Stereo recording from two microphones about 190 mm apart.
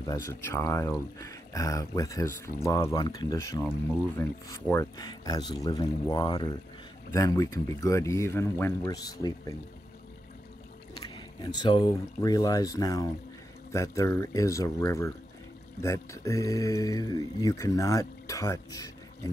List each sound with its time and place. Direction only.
0.0 s speech: 15° left (ahead or behind)
11.0 s speech: 25° left (ahead or behind)